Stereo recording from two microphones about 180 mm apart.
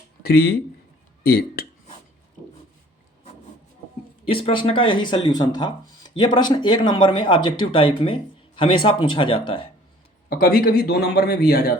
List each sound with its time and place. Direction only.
0.2 s a man's voice: 60° left (ahead or behind)
4.3 s speech: 30° left (ahead or behind)
10.2 s a man's voice: 50° left (ahead or behind)